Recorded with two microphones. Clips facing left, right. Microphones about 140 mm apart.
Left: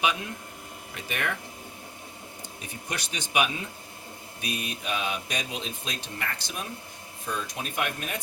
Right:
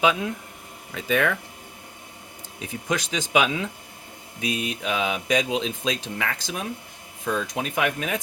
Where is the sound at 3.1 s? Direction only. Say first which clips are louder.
Right 4 dB; 90° right.